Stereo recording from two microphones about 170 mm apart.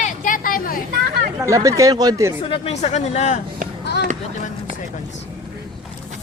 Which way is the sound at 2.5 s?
40° left (ahead or behind).